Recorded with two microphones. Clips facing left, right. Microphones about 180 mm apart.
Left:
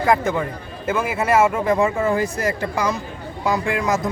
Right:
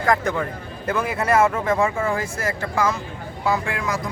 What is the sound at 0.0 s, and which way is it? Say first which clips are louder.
A man's voice: left 2 dB; 5° left (ahead or behind).